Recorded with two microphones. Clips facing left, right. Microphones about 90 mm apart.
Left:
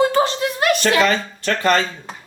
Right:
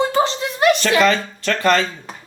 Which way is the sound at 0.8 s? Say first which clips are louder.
Right 1 dB; 25° left (ahead or behind).